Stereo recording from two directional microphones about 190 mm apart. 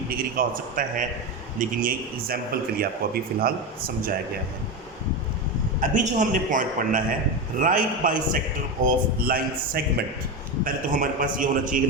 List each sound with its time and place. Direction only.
0.1 s a man's voice: 50° right (ahead or behind)
5.8 s a man's voice: 40° right (ahead or behind)